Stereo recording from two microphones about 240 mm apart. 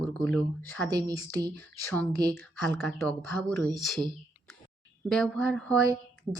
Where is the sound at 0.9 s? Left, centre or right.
Centre.